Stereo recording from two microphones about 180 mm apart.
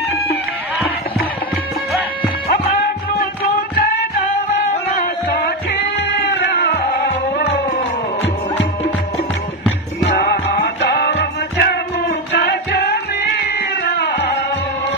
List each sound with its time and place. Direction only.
3.1 s music: 55° left (ahead or behind)
4.9 s music: 55° left (ahead or behind)
10.1 s music: 60° left (ahead or behind)